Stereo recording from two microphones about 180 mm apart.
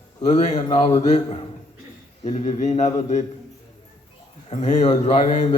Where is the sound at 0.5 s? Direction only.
35° left (ahead or behind).